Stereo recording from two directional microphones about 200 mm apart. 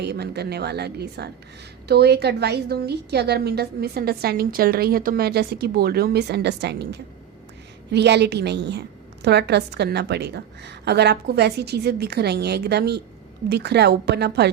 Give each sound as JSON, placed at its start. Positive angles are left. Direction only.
{"t": 0.0, "sound": "a woman's voice", "side_deg": -55}